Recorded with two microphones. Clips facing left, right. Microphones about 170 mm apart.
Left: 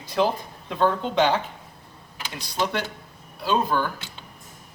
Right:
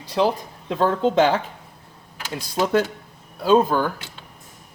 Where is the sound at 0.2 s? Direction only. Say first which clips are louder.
Right 2 dB; 25° right (ahead or behind).